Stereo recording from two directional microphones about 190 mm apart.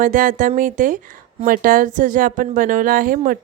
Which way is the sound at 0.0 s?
45° right (ahead or behind).